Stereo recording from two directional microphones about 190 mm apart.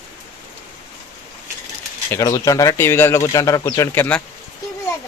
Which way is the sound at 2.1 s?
20° left (ahead or behind).